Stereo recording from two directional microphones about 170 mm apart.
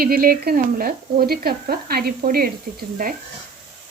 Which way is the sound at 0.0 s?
60° right (ahead or behind).